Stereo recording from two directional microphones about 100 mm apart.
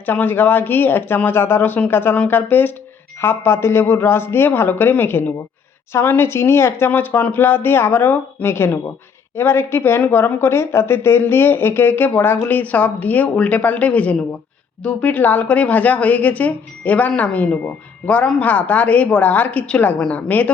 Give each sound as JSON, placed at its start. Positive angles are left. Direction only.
{"t": 0.0, "sound": "a woman's voice", "side_deg": 20}